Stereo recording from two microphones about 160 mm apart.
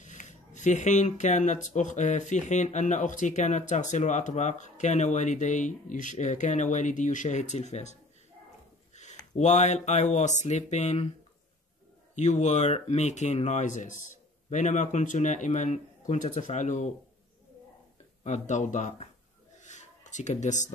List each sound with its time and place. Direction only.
0.0 s speech: 50° left (ahead or behind)
9.4 s speech: 45° left (ahead or behind)
12.2 s speech: 45° left (ahead or behind)
18.2 s speech: 50° left (ahead or behind)
19.6 s a sound: 50° left (ahead or behind)